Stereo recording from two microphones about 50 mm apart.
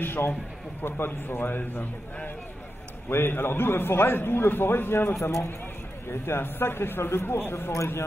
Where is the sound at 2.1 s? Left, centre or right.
Left.